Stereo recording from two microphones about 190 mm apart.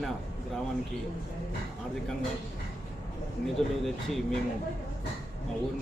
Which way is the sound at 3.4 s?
Centre (ahead or behind).